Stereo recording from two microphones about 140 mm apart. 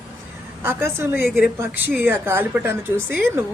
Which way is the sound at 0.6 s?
15° right (ahead or behind).